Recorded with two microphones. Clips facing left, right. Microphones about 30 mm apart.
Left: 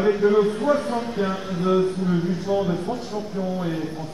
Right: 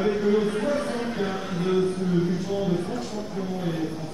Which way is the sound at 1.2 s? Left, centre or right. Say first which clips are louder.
Left 3 dB; centre.